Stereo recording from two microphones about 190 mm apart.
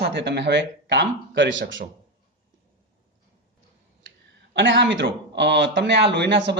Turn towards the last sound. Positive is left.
turn(degrees=-65)  # may be behind; listen again after turning